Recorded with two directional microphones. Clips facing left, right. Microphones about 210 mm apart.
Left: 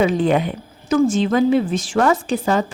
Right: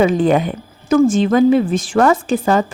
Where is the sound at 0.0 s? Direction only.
50° right (ahead or behind).